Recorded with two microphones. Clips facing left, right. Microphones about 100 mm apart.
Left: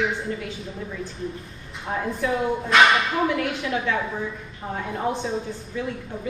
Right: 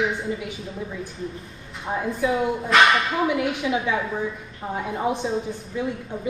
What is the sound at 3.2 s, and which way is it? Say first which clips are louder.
A woman's voice: right 1 dB; 10° right (ahead or behind).